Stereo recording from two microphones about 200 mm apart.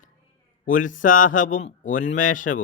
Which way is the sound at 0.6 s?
40° left (ahead or behind).